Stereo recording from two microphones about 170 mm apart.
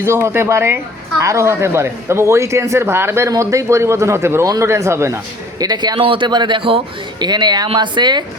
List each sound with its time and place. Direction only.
0.0 s a man's voice: 15° right (ahead or behind)